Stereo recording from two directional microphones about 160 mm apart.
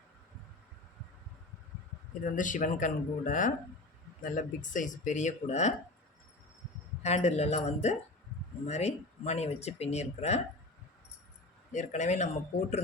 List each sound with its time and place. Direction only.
2.2 s speech: 55° left (ahead or behind)
7.0 s speech: 45° left (ahead or behind)
11.7 s speech: 45° left (ahead or behind)